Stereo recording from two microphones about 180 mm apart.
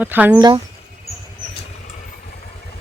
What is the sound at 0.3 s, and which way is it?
Speech, 25° right (ahead or behind).